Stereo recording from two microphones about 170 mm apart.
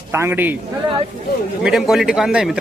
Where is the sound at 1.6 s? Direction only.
Centre (ahead or behind).